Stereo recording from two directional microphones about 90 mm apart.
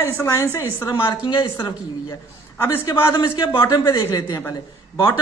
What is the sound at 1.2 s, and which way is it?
Speech, 75° left (ahead or behind).